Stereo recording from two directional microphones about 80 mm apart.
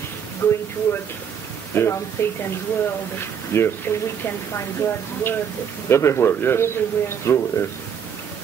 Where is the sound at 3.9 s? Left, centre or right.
Left.